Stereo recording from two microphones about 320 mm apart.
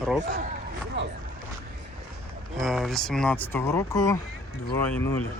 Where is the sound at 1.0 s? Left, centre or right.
Right.